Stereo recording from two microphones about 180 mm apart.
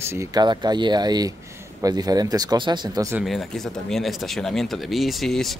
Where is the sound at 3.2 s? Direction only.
Centre (ahead or behind).